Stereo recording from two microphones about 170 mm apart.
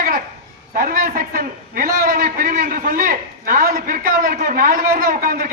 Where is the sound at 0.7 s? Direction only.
55° right (ahead or behind).